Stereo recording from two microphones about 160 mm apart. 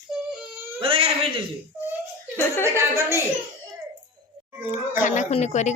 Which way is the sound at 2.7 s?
15° right (ahead or behind).